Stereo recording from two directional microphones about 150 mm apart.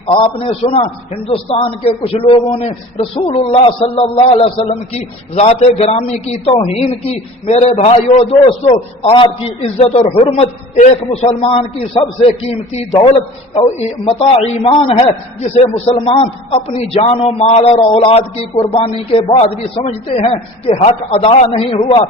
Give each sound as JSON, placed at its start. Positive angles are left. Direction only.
{"t": 0.0, "sound": "a man's voice", "side_deg": 40}